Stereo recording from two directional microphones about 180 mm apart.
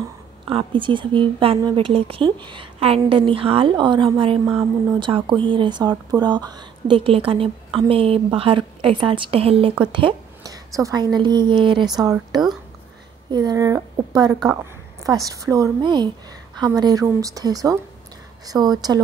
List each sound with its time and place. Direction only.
0.5 s a woman's voice: 30° right (ahead or behind)
14.5 s a sound: 15° right (ahead or behind)
15.2 s a woman's voice: 20° right (ahead or behind)